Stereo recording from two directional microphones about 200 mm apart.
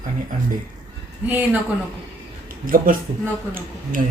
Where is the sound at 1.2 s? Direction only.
10° right (ahead or behind).